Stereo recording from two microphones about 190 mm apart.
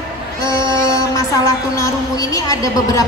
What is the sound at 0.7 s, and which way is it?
Music, 15° left (ahead or behind).